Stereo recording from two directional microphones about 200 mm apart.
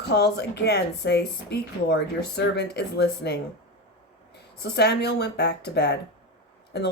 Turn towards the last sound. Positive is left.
turn(degrees=55)  # may be behind; listen again after turning